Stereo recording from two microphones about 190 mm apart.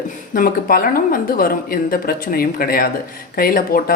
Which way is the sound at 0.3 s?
50° left (ahead or behind).